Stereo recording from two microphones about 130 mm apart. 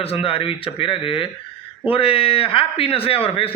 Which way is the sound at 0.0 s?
45° left (ahead or behind).